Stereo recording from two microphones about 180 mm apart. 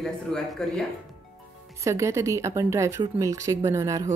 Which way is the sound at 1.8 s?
15° right (ahead or behind).